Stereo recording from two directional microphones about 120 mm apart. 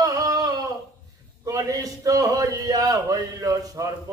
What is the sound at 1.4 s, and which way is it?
A man's voice, 25° right (ahead or behind).